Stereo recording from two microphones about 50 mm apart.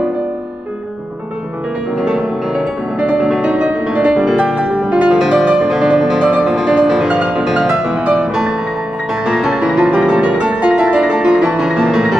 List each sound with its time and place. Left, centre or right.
2.0 s music: centre
3.0 s music: right